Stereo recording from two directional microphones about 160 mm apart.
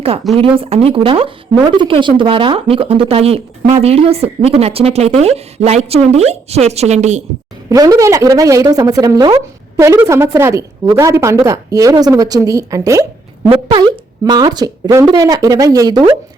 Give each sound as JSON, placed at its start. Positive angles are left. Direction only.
{"t": 0.3, "sound": "speech", "side_deg": -35}
{"t": 7.7, "sound": "speech", "side_deg": -20}